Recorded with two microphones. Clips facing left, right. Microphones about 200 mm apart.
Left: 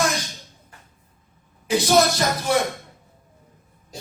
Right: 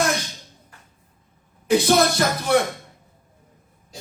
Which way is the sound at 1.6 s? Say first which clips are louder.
Right 1 dB; 60° right (ahead or behind).